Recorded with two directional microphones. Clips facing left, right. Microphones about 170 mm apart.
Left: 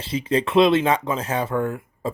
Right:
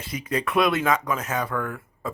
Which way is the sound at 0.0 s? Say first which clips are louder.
Left 5 dB; 25° left (ahead or behind).